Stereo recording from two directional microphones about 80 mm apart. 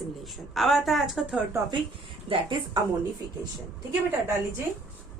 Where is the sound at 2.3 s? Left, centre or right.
Right.